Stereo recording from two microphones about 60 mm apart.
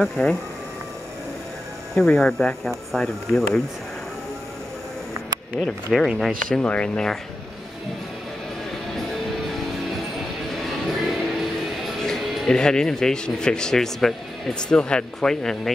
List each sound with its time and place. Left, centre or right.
0.2 s speech: left
2.0 s speech: centre
5.7 s speech: centre
6.6 s speech: centre
10.5 s music: centre
12.4 s speech: centre